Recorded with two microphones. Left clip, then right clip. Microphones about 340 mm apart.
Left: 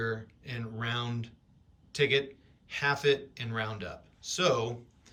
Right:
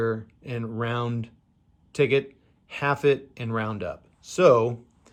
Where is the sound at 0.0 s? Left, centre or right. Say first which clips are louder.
Right 7 dB; centre.